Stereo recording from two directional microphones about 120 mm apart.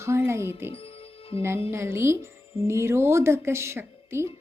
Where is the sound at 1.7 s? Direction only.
20° right (ahead or behind).